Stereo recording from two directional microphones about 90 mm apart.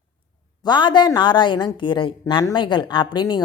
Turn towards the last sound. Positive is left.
turn(degrees=55)  # may be behind; listen again after turning